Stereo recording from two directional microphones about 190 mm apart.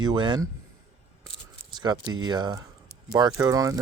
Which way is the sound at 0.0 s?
25° right (ahead or behind).